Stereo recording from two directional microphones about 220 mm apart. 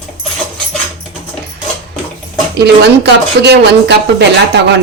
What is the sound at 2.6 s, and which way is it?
Speech, 50° right (ahead or behind).